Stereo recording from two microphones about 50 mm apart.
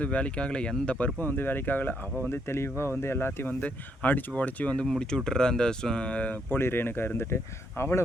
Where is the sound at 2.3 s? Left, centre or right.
Left.